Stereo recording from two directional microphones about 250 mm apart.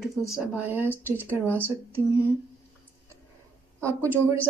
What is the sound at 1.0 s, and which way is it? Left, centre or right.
Speech, centre.